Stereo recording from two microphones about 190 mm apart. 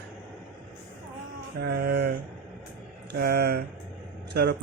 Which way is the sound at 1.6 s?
60° right (ahead or behind).